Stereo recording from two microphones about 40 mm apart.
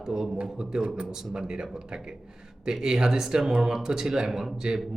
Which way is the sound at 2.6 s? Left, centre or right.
Centre.